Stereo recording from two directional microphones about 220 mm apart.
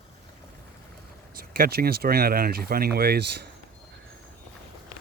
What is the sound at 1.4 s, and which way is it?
Speech, 45° right (ahead or behind).